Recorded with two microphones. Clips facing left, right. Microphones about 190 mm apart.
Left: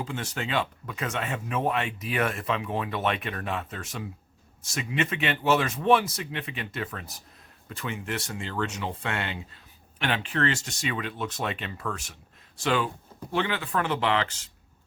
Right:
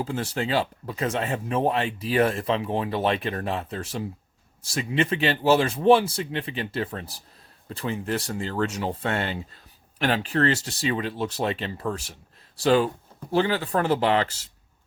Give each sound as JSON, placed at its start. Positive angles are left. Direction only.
{"t": 0.0, "sound": "speech", "side_deg": -35}